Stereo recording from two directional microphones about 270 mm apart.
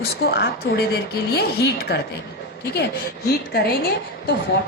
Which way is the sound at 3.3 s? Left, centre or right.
Left.